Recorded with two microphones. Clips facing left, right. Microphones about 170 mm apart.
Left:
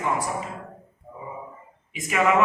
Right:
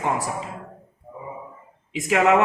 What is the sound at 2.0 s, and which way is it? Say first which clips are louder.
Speech: right 4 dB; 75° right (ahead or behind).